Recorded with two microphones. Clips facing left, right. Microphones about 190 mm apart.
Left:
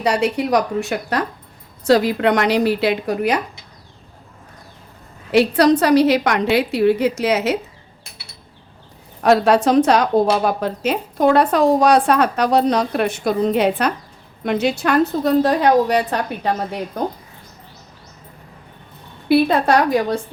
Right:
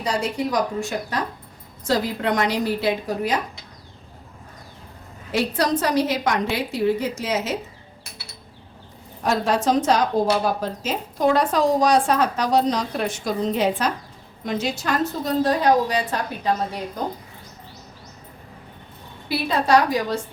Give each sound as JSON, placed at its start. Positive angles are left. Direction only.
{"t": 0.0, "sound": "a woman's voice", "side_deg": 70}
{"t": 5.3, "sound": "a woman's voice", "side_deg": 70}
{"t": 9.2, "sound": "a woman's voice", "side_deg": 65}
{"t": 19.3, "sound": "a woman's voice", "side_deg": 60}